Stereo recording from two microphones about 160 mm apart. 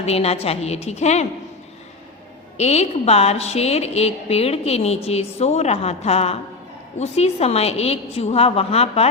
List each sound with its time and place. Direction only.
0.0 s a woman's voice: 40° left (ahead or behind)
2.6 s a woman's voice: 40° left (ahead or behind)